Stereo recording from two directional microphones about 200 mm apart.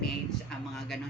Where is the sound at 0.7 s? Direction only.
Centre (ahead or behind).